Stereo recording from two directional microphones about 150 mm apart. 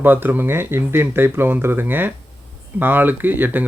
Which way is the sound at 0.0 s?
15° right (ahead or behind).